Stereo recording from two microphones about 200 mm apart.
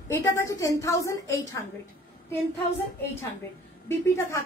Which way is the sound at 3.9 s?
15° left (ahead or behind).